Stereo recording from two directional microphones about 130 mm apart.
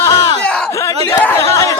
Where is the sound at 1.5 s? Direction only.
25° left (ahead or behind).